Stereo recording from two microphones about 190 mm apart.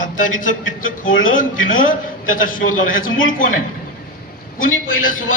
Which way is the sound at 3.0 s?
90° left.